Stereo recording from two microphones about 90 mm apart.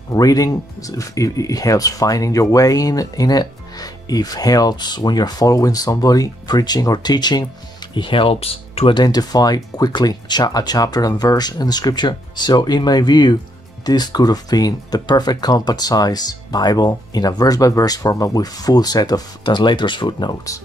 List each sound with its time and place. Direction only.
0.1 s speech: 45° left (ahead or behind)
7.9 s speech: 70° left (ahead or behind); by 8.9 s 90° left
8.9 s speech: 50° left (ahead or behind)